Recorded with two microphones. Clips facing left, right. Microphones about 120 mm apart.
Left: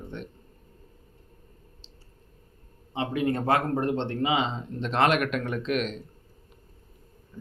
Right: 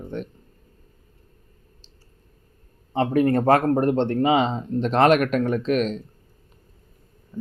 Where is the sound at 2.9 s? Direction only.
50° right (ahead or behind).